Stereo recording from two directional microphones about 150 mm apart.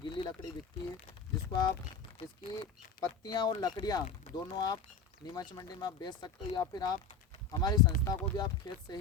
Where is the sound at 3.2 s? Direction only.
25° left (ahead or behind).